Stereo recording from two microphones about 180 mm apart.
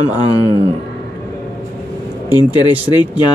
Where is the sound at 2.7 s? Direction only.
10° right (ahead or behind).